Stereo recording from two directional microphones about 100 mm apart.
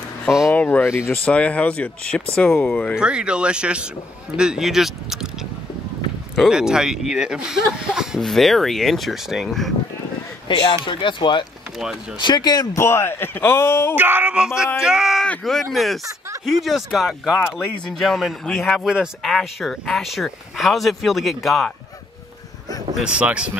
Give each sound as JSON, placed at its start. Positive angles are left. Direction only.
{"t": 0.5, "sound": "a sound", "side_deg": 15}
{"t": 0.9, "sound": "speech", "side_deg": 20}
{"t": 3.0, "sound": "speech", "side_deg": -10}
{"t": 6.3, "sound": "speech", "side_deg": 0}
{"t": 10.5, "sound": "speech", "side_deg": 50}
{"t": 12.7, "sound": "speech", "side_deg": 25}
{"t": 13.9, "sound": "speech", "side_deg": -20}
{"t": 17.4, "sound": "speech", "side_deg": 20}
{"t": 18.0, "sound": "speech", "side_deg": 0}
{"t": 23.0, "sound": "speech", "side_deg": -15}